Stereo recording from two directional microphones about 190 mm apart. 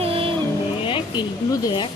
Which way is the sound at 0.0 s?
30° right (ahead or behind).